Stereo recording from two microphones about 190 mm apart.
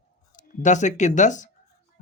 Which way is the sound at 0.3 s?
40° left (ahead or behind).